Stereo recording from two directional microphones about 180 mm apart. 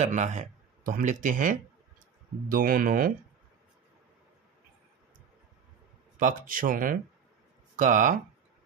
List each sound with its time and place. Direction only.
0.0 s speech: 40° right (ahead or behind)
6.1 s speech: 50° right (ahead or behind)